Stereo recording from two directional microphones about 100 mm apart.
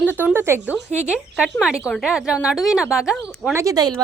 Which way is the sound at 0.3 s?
25° right (ahead or behind).